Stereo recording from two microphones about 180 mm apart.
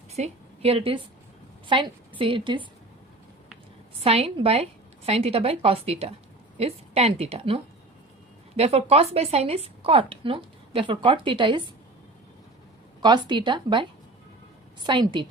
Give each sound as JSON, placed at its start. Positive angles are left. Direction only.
{"t": 0.2, "sound": "a woman's voice", "side_deg": -35}
{"t": 4.0, "sound": "speech", "side_deg": -35}
{"t": 13.0, "sound": "speech", "side_deg": -25}
{"t": 14.8, "sound": "speech", "side_deg": -25}